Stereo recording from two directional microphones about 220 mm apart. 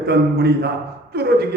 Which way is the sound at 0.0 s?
45° right (ahead or behind).